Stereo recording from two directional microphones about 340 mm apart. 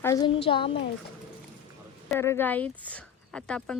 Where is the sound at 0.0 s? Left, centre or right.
Centre.